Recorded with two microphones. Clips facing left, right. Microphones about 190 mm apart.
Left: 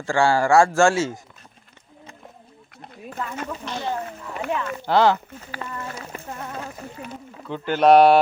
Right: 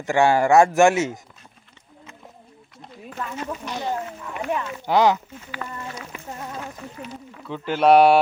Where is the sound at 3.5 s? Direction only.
15° right (ahead or behind).